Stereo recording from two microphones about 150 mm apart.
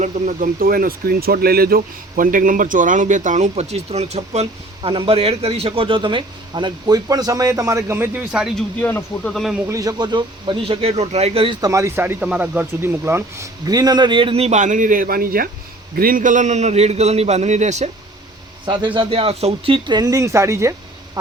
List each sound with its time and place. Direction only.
0.0 s speech: 55° right (ahead or behind); by 8.2 s 15° right (ahead or behind)
8.3 s speech: 5° right (ahead or behind)
8.8 s speech: 15° left (ahead or behind)
9.3 s speech: centre (ahead or behind)
9.6 s speech: 25° right (ahead or behind); by 11.5 s 40° right (ahead or behind)
11.6 s speech: 20° right (ahead or behind); by 17.8 s 50° right (ahead or behind)
18.6 s a man's voice: 30° right (ahead or behind)